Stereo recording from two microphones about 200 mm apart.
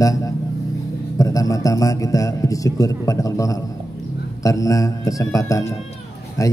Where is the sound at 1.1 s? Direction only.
15° left (ahead or behind).